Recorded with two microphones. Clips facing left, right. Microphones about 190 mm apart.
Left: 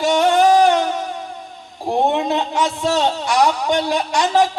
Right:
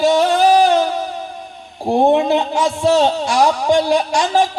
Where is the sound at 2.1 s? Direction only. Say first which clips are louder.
Right 5 dB; 30° right (ahead or behind).